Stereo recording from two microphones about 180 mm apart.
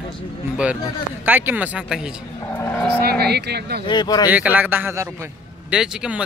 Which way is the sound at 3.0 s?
65° right (ahead or behind).